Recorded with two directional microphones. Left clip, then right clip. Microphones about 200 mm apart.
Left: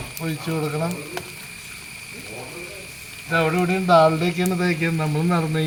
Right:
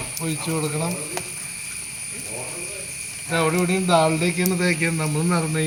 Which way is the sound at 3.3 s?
25° left (ahead or behind).